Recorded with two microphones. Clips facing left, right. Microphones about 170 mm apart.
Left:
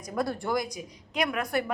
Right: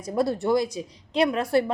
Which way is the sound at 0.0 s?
25° right (ahead or behind).